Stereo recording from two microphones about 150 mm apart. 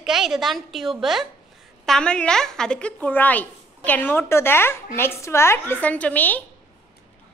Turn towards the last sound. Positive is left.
turn(degrees=10)  # may be behind; listen again after turning